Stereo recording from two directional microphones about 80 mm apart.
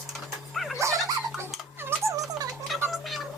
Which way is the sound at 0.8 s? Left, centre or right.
Right.